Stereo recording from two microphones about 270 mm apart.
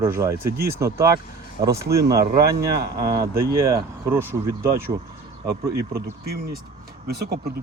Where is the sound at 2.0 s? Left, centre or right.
Right.